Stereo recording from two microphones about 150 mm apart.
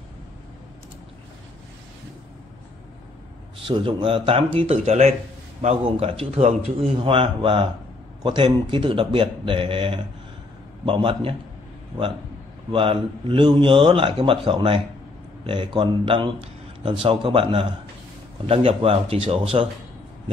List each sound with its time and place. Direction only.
3.6 s a man's voice: 35° right (ahead or behind)
12.7 s a man's voice: 35° right (ahead or behind)